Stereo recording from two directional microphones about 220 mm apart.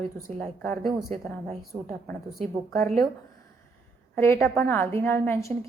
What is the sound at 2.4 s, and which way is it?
Speech, 30° right (ahead or behind).